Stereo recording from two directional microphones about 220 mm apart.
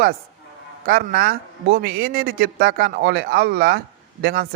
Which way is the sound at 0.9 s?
40° right (ahead or behind).